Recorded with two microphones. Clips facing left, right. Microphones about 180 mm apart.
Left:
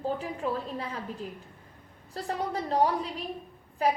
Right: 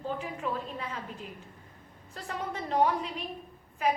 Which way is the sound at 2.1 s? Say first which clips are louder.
Left 5 dB; 35° left (ahead or behind).